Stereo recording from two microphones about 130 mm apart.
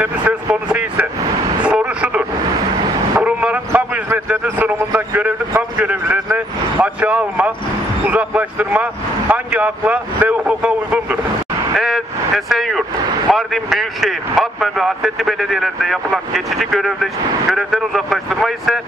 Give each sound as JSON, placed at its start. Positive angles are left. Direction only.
{"t": 0.7, "sound": "vehicle", "side_deg": -10}
{"t": 8.1, "sound": "a man's voice", "side_deg": -10}
{"t": 11.7, "sound": "vehicle", "side_deg": 0}
{"t": 12.4, "sound": "speech", "side_deg": 0}